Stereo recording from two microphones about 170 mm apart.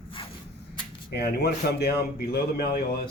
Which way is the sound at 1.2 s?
70° left (ahead or behind).